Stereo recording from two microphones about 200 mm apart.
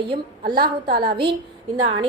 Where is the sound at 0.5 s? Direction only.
50° right (ahead or behind).